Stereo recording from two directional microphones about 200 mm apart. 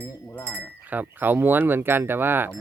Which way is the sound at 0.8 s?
10° right (ahead or behind).